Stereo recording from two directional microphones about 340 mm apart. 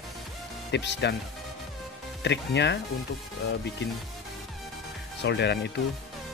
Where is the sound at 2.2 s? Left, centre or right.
Left.